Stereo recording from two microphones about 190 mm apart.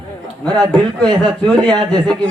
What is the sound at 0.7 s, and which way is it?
Speech, 20° right (ahead or behind).